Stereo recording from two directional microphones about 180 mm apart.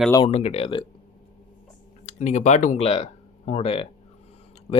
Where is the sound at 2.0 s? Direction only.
40° left (ahead or behind).